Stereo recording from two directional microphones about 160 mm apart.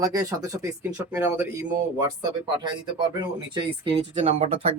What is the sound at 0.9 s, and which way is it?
Speech, 10° right (ahead or behind).